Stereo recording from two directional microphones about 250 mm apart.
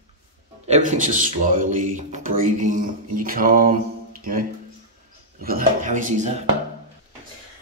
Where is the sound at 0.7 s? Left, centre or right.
Right.